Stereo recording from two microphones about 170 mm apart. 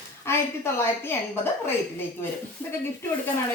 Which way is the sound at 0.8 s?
15° left (ahead or behind).